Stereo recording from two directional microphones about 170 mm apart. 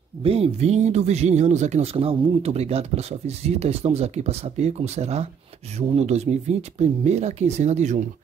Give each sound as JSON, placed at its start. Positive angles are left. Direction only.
{"t": 0.2, "sound": "speech", "side_deg": -35}